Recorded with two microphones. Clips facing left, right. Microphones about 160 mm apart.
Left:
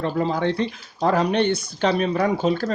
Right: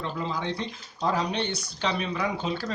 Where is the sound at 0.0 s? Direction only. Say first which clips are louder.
Left 9 dB; 50° left (ahead or behind).